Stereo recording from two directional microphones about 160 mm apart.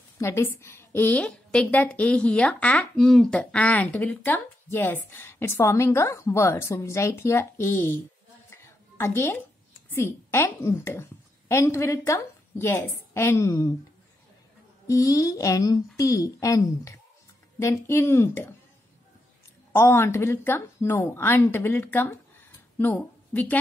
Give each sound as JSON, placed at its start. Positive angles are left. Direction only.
{"t": 0.2, "sound": "a woman's voice", "side_deg": 15}
{"t": 14.9, "sound": "a woman's voice", "side_deg": 20}
{"t": 19.7, "sound": "a woman's voice", "side_deg": 15}